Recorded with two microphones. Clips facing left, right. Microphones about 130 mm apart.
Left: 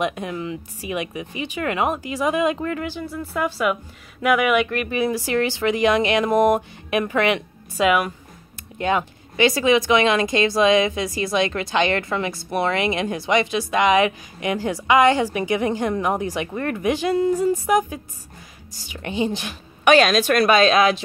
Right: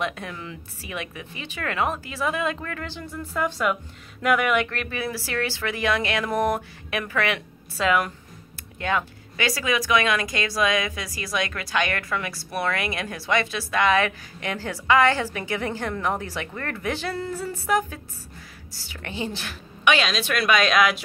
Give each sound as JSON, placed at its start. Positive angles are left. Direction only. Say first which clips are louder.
{"t": 0.0, "sound": "speech", "louder": "left 6 dB", "side_deg": 15}
{"t": 2.9, "sound": "speech", "louder": "left 5 dB", "side_deg": 10}
{"t": 19.8, "sound": "a woman's voice", "louder": "left 7 dB", "side_deg": 45}